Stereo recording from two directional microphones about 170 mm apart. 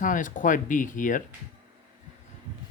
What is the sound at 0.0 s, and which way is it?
Speech, 50° left (ahead or behind).